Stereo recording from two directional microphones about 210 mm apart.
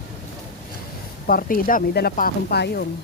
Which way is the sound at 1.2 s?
45° left (ahead or behind).